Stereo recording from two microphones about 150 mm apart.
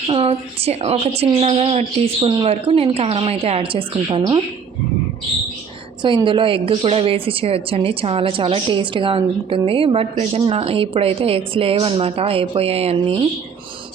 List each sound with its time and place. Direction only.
0.1 s a woman's voice: 40° right (ahead or behind)
6.0 s a woman's voice: 30° right (ahead or behind)